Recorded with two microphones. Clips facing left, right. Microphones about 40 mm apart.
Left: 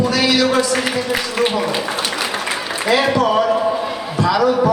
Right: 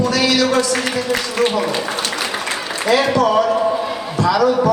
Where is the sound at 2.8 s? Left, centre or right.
Centre.